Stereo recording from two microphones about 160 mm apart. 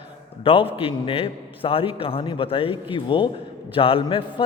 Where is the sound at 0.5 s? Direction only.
35° left (ahead or behind).